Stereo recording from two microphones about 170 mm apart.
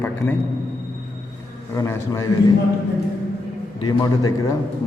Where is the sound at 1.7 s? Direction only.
15° left (ahead or behind).